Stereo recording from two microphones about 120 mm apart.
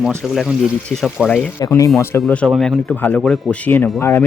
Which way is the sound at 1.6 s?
25° left (ahead or behind).